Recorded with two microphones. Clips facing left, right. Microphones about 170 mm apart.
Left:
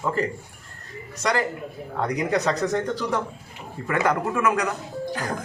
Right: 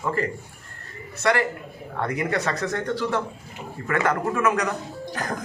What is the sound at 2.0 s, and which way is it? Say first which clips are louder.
A man's voice: left 2 dB; 15° left (ahead or behind).